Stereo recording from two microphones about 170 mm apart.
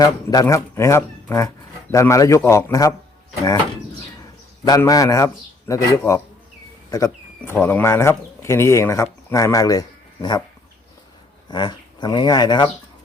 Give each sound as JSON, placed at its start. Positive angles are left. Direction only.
{"t": 0.0, "sound": "speech", "side_deg": 20}
{"t": 4.2, "sound": "a man's voice", "side_deg": 20}
{"t": 11.4, "sound": "speech", "side_deg": 25}